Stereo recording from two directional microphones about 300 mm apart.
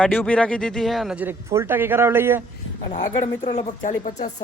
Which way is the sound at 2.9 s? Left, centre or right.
Left.